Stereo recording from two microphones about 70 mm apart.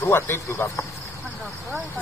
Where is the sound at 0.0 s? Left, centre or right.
Left.